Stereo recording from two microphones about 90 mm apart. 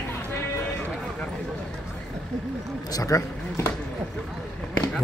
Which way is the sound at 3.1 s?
40° left (ahead or behind).